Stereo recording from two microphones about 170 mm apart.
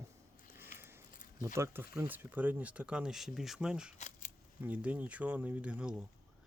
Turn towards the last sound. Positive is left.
turn(degrees=-5)  # may be behind; listen again after turning